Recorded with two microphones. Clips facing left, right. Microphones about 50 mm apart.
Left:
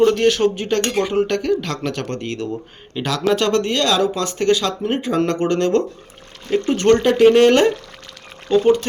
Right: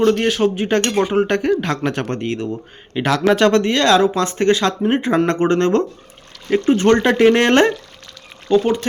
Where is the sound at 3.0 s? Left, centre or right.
Right.